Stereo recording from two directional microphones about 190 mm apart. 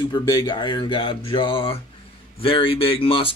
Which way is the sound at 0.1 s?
20° left (ahead or behind).